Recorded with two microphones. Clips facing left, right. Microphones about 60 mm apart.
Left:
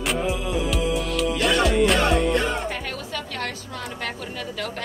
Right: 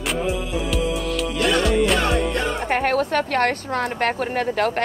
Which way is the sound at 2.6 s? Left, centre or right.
Right.